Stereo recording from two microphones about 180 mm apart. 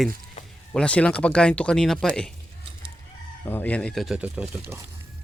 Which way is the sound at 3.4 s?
10° left (ahead or behind).